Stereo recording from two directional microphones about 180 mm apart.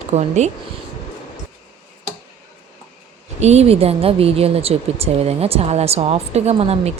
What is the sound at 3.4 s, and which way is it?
A woman's voice, 35° right (ahead or behind).